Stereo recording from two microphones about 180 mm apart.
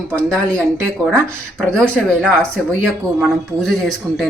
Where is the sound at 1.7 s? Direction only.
5° left (ahead or behind).